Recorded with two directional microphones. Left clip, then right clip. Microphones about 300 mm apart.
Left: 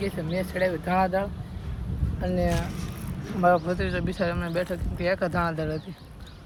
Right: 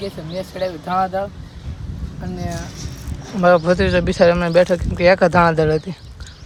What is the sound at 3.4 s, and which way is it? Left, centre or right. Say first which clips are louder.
Speech: right 9 dB; right.